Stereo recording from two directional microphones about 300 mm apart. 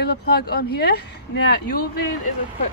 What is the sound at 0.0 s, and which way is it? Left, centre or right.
Speech, left.